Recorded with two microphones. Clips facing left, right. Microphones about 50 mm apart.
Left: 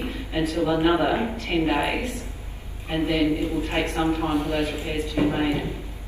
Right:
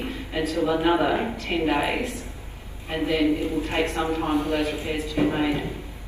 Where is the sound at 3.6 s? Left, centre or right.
Centre.